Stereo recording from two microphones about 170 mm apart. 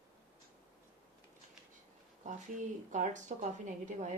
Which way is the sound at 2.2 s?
45° right (ahead or behind).